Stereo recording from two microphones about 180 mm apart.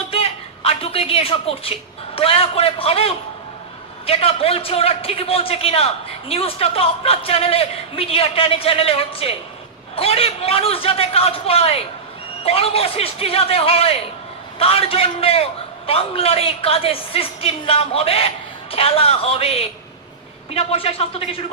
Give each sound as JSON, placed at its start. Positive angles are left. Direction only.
{"t": 0.1, "sound": "a woman's voice", "side_deg": 35}